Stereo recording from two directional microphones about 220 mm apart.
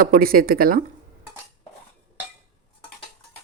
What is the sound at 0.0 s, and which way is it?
Speech, 40° right (ahead or behind).